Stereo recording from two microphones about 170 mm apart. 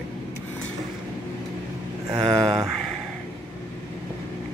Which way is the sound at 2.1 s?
Centre (ahead or behind).